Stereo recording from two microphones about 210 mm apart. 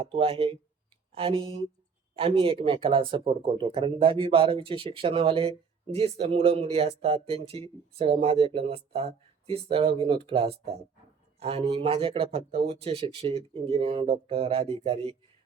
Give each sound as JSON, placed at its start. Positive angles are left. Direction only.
{"t": 0.0, "sound": "speech", "side_deg": -25}